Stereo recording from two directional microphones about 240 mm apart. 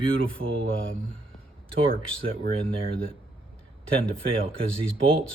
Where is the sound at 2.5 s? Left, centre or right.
Right.